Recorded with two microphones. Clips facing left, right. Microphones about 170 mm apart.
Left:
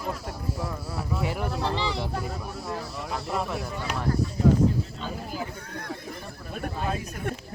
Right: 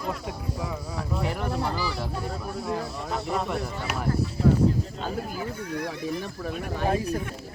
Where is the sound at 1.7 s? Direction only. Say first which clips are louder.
Left 1 dB; 20° left (ahead or behind).